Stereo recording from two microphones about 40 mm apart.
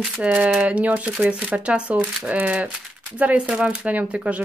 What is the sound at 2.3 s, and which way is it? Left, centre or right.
Speech, right.